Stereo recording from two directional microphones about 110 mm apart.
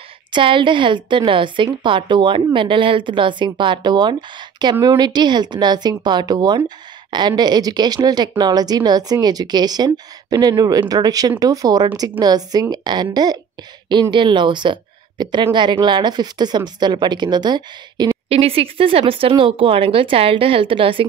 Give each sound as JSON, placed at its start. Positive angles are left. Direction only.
{"t": 0.3, "sound": "a woman's voice", "side_deg": -50}
{"t": 18.3, "sound": "speech", "side_deg": -60}